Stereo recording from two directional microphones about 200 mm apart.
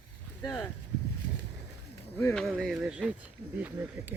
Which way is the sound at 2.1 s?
5° left (ahead or behind).